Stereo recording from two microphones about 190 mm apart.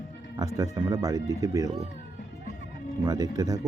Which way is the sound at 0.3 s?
20° right (ahead or behind).